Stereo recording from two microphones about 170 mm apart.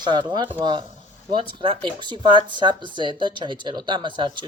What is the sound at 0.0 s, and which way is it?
Speech, 25° right (ahead or behind).